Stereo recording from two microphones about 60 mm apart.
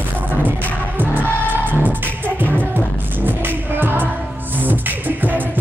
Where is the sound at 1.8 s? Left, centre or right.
Right.